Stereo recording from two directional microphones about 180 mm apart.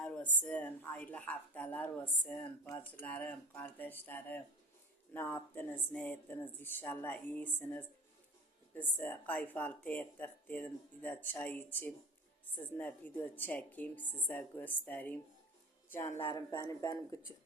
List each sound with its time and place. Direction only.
0.0 s speech: 5° left (ahead or behind)